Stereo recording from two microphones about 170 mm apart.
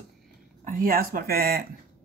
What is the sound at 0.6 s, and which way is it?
Speech, 55° right (ahead or behind).